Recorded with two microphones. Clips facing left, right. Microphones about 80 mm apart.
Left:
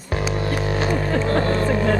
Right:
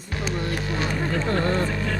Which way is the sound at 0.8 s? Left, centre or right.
Left.